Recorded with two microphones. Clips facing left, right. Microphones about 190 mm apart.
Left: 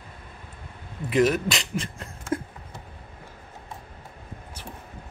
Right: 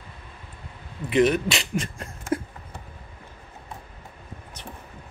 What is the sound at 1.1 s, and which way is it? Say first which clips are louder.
Speech: right 1 dB; centre (ahead or behind).